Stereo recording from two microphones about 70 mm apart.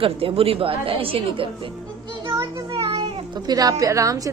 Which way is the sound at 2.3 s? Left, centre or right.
Right.